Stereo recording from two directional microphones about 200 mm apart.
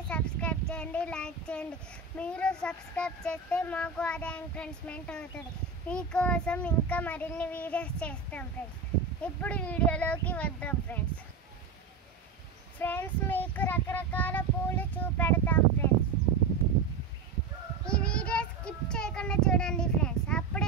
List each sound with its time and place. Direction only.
0.1 s speech: 5° left (ahead or behind)
5.9 s child singing: 5° left (ahead or behind)
12.7 s child singing: 10° left (ahead or behind)
17.8 s child singing: 5° left (ahead or behind)